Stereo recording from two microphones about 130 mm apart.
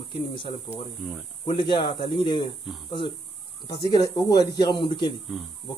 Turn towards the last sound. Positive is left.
turn(degrees=40)  # may be behind; listen again after turning